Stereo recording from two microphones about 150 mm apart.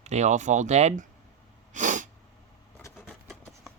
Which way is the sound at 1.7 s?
55° right (ahead or behind).